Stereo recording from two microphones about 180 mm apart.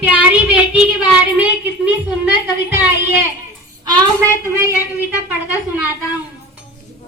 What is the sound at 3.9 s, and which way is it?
Child singing, 15° right (ahead or behind).